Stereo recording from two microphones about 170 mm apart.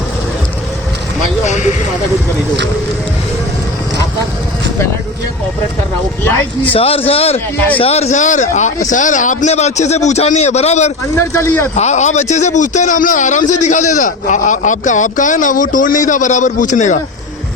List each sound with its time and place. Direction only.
6.7 s a man's voice: 35° left (ahead or behind)
11.1 s speech: 15° left (ahead or behind)
11.7 s a man's voice: 45° left (ahead or behind)